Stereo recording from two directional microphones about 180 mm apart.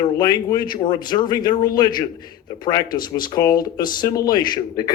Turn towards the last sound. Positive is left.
turn(degrees=20)  # may be behind; listen again after turning